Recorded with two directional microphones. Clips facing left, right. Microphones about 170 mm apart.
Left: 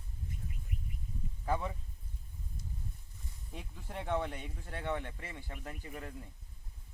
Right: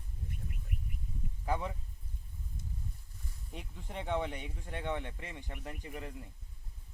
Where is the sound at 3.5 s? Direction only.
15° right (ahead or behind).